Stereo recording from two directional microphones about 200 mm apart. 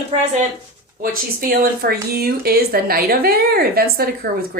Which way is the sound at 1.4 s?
50° right (ahead or behind).